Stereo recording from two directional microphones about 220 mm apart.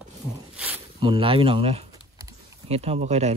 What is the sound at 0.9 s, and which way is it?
Speech, 25° right (ahead or behind).